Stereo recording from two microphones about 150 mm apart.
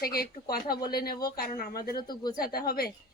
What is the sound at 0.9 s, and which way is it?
A woman's voice, 90° left.